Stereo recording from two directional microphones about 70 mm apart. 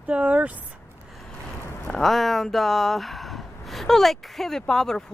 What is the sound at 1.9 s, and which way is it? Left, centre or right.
Speech, centre.